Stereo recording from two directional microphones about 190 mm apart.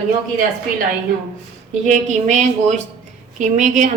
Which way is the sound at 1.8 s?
40° right (ahead or behind).